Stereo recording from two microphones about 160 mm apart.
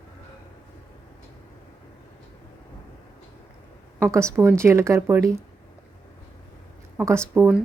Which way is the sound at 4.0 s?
15° right (ahead or behind).